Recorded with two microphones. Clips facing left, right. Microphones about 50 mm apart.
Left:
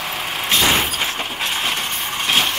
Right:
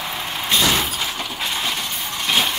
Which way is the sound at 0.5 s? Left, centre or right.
Left.